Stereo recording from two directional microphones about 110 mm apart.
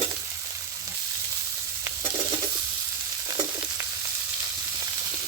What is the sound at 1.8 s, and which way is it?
Stir, 20° right (ahead or behind).